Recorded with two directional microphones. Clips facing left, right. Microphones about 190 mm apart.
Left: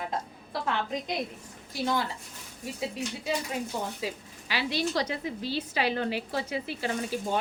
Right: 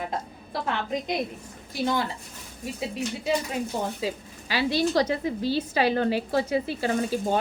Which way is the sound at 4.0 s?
35° right (ahead or behind).